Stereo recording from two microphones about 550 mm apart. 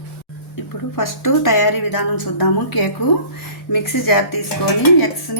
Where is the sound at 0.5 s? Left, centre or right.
Left.